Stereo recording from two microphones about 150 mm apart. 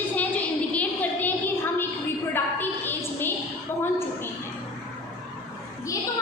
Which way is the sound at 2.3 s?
15° left (ahead or behind).